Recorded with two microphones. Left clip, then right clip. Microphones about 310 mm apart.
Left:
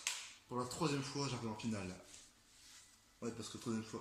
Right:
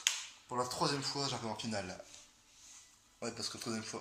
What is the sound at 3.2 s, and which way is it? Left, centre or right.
Speech, centre.